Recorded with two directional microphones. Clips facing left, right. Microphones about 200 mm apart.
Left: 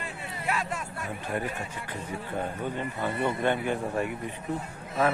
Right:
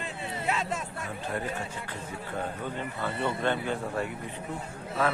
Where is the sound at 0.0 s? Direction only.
25° right (ahead or behind).